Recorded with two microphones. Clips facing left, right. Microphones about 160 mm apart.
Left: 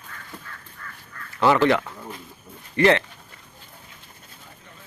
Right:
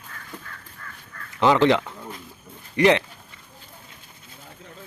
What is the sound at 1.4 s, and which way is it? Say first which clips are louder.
Speech: right 1 dB; 15° right (ahead or behind).